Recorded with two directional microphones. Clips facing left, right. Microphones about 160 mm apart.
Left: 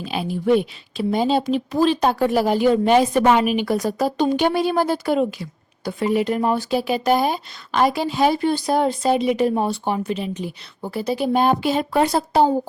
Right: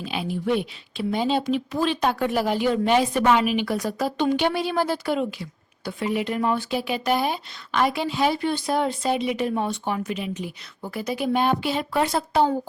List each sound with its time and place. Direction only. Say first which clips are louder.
0.0 s speech: left 4 dB; 40° left (ahead or behind)